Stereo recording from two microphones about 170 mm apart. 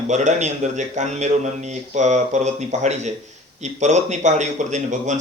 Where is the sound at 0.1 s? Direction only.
45° right (ahead or behind).